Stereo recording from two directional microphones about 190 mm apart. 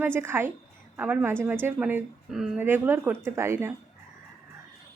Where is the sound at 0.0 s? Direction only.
10° right (ahead or behind).